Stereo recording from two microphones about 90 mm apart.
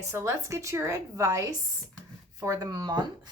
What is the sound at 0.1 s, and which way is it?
A woman's voice, 30° right (ahead or behind).